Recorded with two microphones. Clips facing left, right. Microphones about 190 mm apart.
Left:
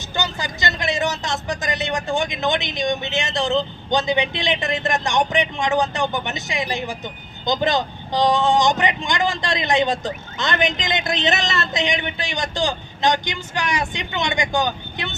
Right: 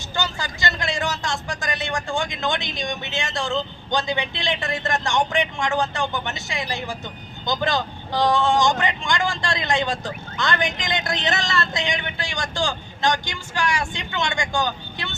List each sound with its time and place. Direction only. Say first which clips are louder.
0.2 s speech: left 1 dB; 20° left (ahead or behind)